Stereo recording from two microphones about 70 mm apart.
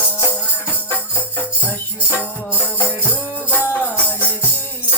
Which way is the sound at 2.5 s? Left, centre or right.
Left.